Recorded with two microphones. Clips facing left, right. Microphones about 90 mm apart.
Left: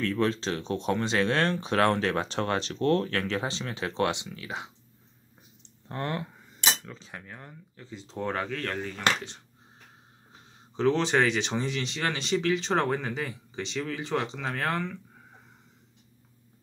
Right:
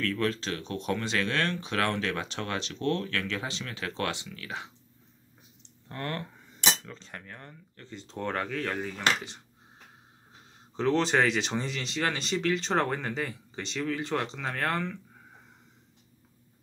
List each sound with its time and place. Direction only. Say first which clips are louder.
0.0 s speech: left 3 dB; 25° left (ahead or behind)
5.9 s speech: left 3 dB; 20° left (ahead or behind)
6.5 s speech: even; 5° left (ahead or behind)
10.8 s speech: left 1 dB; centre (ahead or behind)